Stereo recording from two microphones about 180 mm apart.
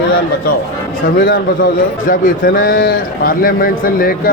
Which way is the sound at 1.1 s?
50° left (ahead or behind).